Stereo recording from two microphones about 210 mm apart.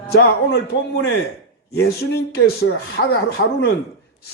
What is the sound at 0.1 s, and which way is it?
Speech, 50° left (ahead or behind).